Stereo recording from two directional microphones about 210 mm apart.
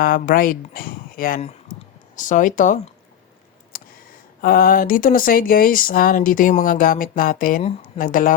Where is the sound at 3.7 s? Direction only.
45° left (ahead or behind).